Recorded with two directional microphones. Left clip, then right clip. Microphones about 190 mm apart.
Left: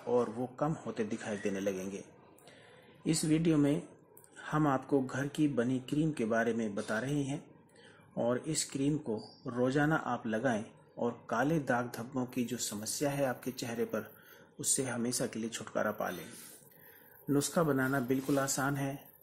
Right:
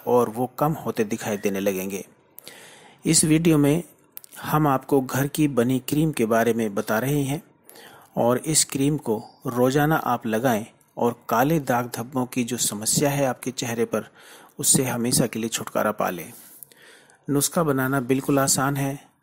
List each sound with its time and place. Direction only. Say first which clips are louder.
0.0 s speech: right 11 dB; 35° right (ahead or behind)
17.3 s speech: right 8 dB; 25° right (ahead or behind)